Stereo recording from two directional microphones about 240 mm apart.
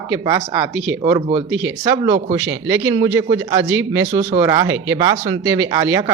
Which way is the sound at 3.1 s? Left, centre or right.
Centre.